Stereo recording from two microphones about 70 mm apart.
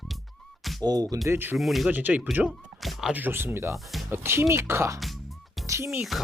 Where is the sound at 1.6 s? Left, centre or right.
Centre.